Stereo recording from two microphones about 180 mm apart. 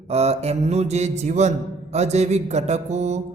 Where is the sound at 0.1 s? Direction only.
35° right (ahead or behind).